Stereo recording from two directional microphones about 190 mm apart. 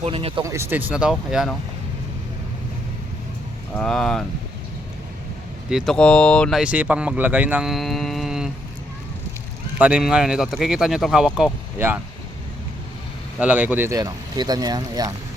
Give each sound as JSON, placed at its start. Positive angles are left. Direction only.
{"t": 0.0, "sound": "speech", "side_deg": -30}
{"t": 0.4, "sound": "speech", "side_deg": -15}
{"t": 3.8, "sound": "speech", "side_deg": 5}
{"t": 5.7, "sound": "speech", "side_deg": 0}
{"t": 9.7, "sound": "speech", "side_deg": -5}
{"t": 13.4, "sound": "speech", "side_deg": -5}